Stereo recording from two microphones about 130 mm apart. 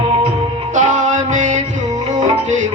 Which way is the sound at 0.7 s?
70° right (ahead or behind).